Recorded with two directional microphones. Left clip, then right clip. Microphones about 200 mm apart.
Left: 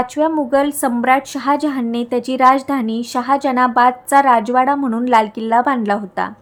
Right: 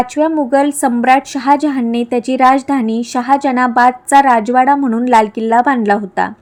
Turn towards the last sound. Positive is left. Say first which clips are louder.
# right 5 dB
turn(degrees=-15)  # may be behind; listen again after turning